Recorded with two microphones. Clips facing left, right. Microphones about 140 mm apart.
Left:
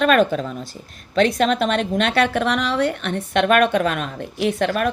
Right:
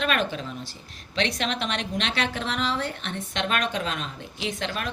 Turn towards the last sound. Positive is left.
turn(degrees=55)  # may be behind; listen again after turning